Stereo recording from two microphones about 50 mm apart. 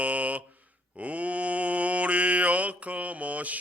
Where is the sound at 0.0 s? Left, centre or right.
Right.